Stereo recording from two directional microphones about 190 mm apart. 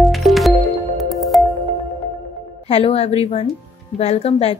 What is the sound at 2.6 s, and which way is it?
A woman's voice, 30° left (ahead or behind).